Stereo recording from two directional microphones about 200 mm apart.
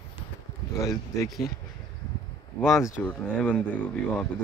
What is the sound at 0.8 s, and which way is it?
Speech, 15° left (ahead or behind).